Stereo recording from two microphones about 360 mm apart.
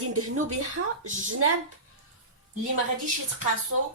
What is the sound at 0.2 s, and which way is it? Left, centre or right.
Speech, right.